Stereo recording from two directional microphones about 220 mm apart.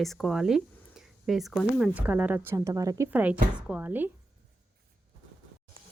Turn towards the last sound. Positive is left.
turn(degrees=-10)  # may be behind; listen again after turning